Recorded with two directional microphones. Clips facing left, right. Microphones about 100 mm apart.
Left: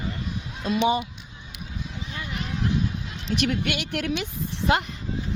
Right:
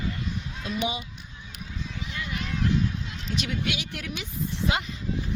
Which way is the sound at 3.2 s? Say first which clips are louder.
Left 5 dB; 60° left (ahead or behind).